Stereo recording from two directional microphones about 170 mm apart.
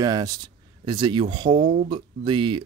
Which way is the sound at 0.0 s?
20° right (ahead or behind).